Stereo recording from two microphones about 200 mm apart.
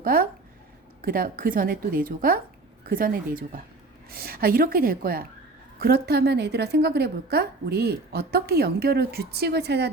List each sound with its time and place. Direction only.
0.0 s a woman's voice: 45° right (ahead or behind)